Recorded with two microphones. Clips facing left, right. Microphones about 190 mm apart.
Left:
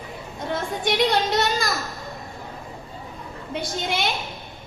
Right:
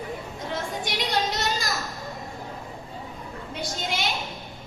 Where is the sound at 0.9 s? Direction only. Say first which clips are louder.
Left 8 dB; 60° left (ahead or behind).